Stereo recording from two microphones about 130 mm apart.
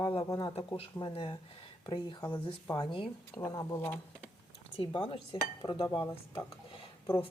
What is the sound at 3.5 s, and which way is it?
Speech, 30° left (ahead or behind).